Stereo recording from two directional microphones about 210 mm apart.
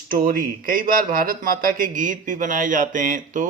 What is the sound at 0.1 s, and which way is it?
A man's voice, 45° right (ahead or behind).